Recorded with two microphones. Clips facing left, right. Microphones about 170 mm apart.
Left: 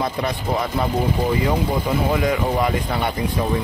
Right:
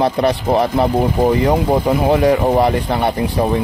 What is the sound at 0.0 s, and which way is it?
Speech, 70° right (ahead or behind).